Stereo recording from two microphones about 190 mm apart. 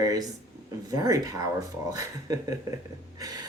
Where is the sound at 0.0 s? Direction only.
20° right (ahead or behind).